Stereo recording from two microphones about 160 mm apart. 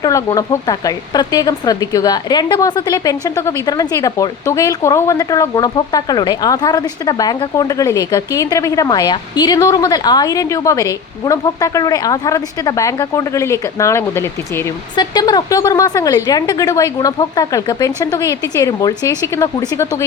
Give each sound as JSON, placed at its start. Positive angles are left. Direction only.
{"t": 0.0, "sound": "speech", "side_deg": 20}